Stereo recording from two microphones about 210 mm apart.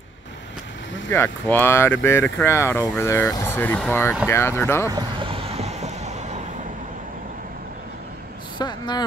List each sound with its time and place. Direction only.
1.1 s speech: 10° left (ahead or behind)
4.9 s vehicle: 25° right (ahead or behind)
8.5 s a sound: 20° left (ahead or behind)